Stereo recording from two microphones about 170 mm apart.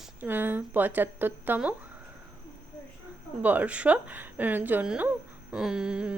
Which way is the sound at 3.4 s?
10° right (ahead or behind).